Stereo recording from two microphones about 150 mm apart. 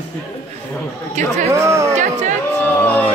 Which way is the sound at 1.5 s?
20° right (ahead or behind).